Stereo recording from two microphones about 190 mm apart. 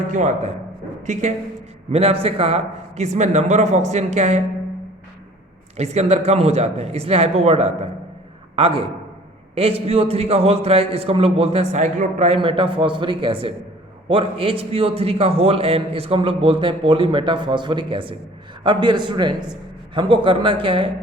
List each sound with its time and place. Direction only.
0.1 s a man's voice: 40° right (ahead or behind)
5.7 s a man's voice: 35° right (ahead or behind)